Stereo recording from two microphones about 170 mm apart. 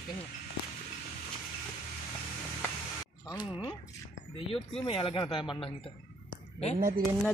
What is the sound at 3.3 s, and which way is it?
Speech, 25° left (ahead or behind).